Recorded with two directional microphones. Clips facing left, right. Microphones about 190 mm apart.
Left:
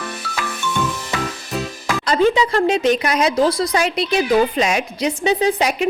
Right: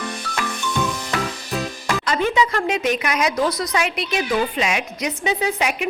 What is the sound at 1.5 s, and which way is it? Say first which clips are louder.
Music: left 1 dB; centre (ahead or behind).